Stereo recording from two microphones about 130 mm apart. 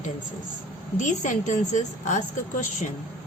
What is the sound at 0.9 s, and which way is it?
A woman's voice, 75° left (ahead or behind).